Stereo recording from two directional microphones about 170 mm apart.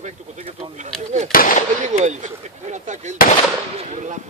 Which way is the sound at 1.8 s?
45° right (ahead or behind).